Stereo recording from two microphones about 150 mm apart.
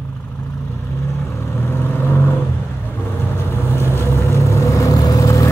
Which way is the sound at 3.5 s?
15° left (ahead or behind).